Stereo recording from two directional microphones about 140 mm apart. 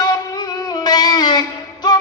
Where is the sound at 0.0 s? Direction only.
30° left (ahead or behind).